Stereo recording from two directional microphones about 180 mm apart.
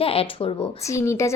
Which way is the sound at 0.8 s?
15° left (ahead or behind).